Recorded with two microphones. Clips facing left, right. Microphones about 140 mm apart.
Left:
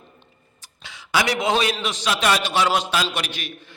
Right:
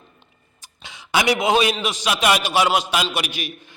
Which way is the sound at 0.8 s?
20° right (ahead or behind).